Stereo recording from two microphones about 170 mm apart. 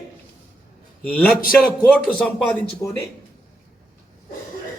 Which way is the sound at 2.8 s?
15° left (ahead or behind).